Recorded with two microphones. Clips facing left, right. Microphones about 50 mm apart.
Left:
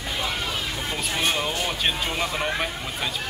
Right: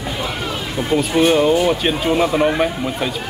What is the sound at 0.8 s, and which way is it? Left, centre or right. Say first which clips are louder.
Speech: right 15 dB; centre.